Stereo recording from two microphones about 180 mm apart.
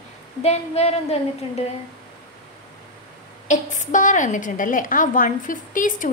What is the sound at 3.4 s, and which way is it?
A woman's voice, 40° left (ahead or behind).